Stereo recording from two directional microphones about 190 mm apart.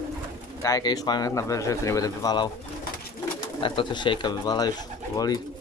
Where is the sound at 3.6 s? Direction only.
25° left (ahead or behind).